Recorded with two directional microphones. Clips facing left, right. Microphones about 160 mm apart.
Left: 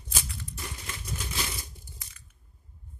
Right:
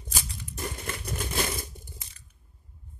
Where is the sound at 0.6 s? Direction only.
50° right (ahead or behind).